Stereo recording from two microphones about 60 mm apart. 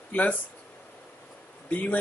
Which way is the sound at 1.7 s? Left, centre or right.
Left.